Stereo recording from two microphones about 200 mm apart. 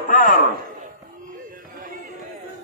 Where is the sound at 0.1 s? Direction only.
40° left (ahead or behind).